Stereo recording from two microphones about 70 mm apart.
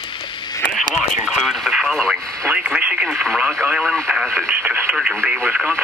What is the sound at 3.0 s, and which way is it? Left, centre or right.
Speech, centre.